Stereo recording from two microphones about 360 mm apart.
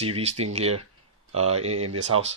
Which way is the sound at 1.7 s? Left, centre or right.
Right.